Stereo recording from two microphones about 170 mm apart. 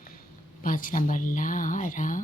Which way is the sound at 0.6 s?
55° left (ahead or behind).